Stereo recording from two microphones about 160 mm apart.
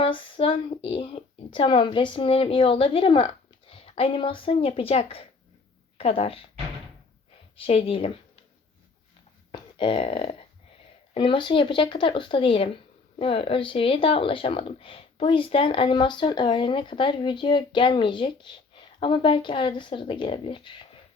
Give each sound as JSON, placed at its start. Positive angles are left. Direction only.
{"t": 0.0, "sound": "speech", "side_deg": 35}
{"t": 7.5, "sound": "speech", "side_deg": 35}
{"t": 9.5, "sound": "speech", "side_deg": 30}